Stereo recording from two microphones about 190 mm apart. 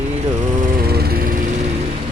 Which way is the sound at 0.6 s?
55° right (ahead or behind).